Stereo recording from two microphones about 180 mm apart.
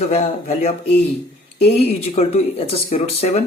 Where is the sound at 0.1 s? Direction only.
40° left (ahead or behind).